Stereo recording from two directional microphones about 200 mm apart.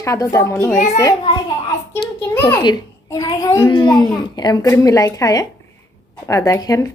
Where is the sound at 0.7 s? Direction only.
40° left (ahead or behind).